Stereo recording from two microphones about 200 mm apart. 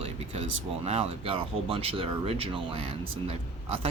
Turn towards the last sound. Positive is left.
turn(degrees=-30)  # may be behind; listen again after turning